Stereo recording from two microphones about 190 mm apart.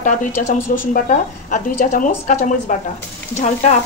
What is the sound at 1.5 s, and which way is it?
A woman's voice, 45° left (ahead or behind).